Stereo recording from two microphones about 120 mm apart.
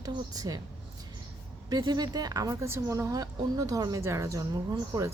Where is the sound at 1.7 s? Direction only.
35° right (ahead or behind).